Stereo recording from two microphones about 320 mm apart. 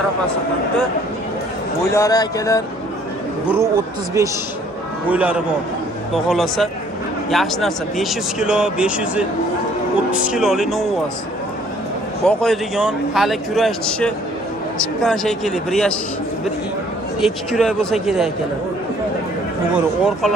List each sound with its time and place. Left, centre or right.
1.9 s speech: centre
3.6 s speech: centre
12.2 s speech: centre
17.2 s speech: centre
19.7 s speech: centre